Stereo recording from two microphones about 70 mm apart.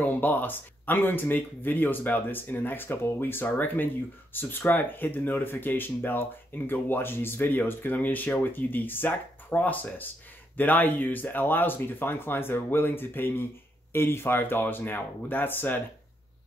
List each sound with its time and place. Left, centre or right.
0.0 s speech: left